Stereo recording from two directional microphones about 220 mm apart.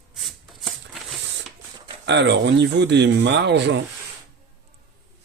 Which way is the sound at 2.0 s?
50° right (ahead or behind).